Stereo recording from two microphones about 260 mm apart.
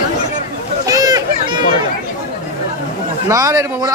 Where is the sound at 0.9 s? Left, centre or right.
Centre.